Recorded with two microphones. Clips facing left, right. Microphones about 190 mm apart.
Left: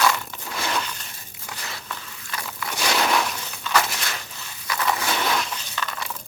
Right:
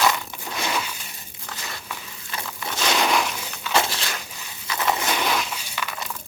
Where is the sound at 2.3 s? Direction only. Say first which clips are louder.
Even; 20° right (ahead or behind).